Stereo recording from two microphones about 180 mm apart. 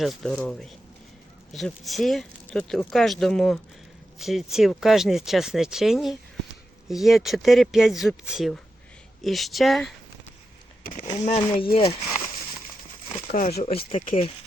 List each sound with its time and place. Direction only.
0.0 s speech: centre (ahead or behind)
10.8 s speech: 45° left (ahead or behind)
11.3 s speech: 30° left (ahead or behind)
13.3 s speech: 55° left (ahead or behind)